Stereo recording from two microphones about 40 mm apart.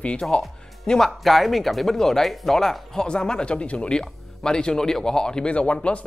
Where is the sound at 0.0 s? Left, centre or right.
Left.